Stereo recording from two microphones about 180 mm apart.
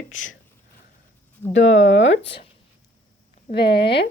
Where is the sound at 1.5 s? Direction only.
90° left.